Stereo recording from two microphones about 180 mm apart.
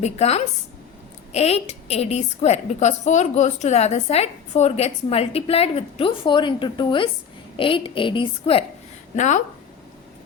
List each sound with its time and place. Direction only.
0.0 s a woman's voice: 35° left (ahead or behind)
9.1 s a woman's voice: 40° left (ahead or behind)